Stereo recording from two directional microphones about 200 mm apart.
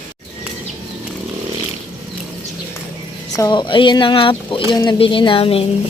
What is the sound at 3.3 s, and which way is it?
Speech, 20° left (ahead or behind).